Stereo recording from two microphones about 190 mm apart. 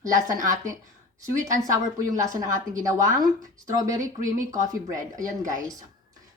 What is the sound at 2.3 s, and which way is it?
Speech, 15° right (ahead or behind).